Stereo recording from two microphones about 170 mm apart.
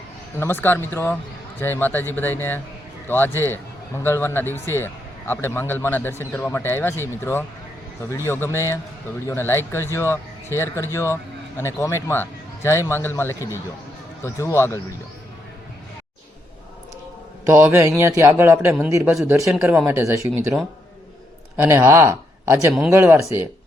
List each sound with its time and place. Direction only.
0.3 s a man's voice: 10° left (ahead or behind)
17.4 s a man's voice: 15° right (ahead or behind)
21.5 s a man's voice: 15° right (ahead or behind)